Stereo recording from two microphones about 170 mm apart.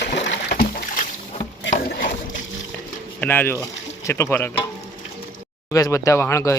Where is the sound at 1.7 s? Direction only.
55° left (ahead or behind).